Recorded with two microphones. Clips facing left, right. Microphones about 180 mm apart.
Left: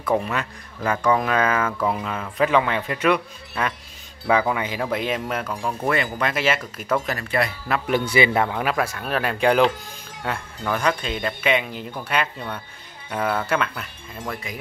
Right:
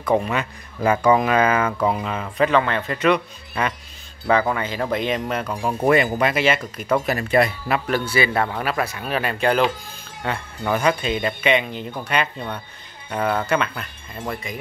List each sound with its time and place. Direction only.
0.0 s speech: centre (ahead or behind)
0.8 s speech: 10° right (ahead or behind)
2.0 s a man's voice: centre (ahead or behind)
5.9 s speech: 15° right (ahead or behind)
6.3 s speech: centre (ahead or behind)
7.1 s speech: 20° right (ahead or behind)
7.8 s a man's voice: 20° left (ahead or behind)
8.6 s speech: centre (ahead or behind)
10.6 s speech: 5° right (ahead or behind)